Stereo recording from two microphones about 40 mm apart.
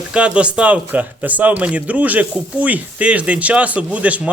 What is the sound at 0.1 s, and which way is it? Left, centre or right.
Speech, right.